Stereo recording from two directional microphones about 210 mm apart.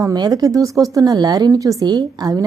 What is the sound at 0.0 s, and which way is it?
A woman's voice, 20° right (ahead or behind).